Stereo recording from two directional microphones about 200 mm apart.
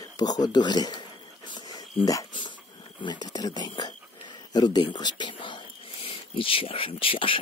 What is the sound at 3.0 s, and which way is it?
Speech, 20° left (ahead or behind).